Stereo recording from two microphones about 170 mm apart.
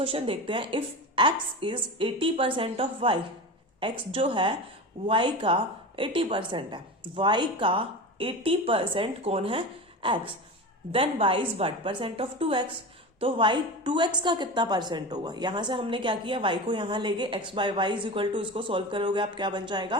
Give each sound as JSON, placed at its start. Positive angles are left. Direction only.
{"t": 0.0, "sound": "a woman's voice", "side_deg": -30}